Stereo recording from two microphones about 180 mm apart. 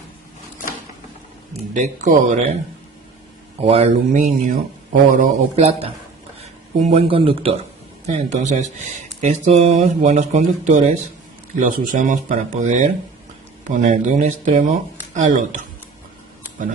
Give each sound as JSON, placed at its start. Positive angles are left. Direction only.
{"t": 1.7, "sound": "speech", "side_deg": -45}
{"t": 3.6, "sound": "speech", "side_deg": -35}